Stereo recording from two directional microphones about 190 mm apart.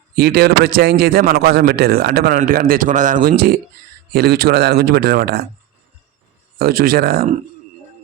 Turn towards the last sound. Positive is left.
turn(degrees=-50)  # may be behind; listen again after turning